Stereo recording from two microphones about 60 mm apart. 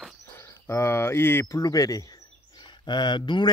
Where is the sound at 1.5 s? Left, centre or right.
Left.